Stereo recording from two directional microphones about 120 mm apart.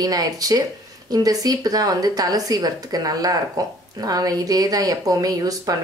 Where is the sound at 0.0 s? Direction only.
30° right (ahead or behind).